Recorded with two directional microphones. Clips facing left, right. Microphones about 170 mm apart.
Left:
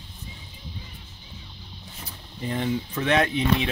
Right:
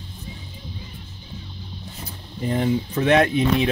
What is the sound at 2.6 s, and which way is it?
Speech, 40° right (ahead or behind).